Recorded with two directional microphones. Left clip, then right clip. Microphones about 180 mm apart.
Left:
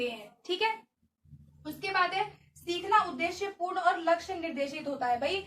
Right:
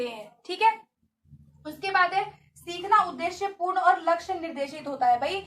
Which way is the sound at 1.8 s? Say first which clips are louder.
Right 5 dB; 25° left (ahead or behind).